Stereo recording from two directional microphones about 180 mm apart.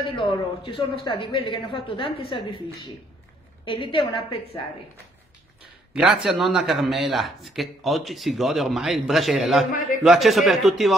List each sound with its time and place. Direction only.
0.0 s a man's voice: 30° left (ahead or behind)
5.9 s speech: 5° right (ahead or behind)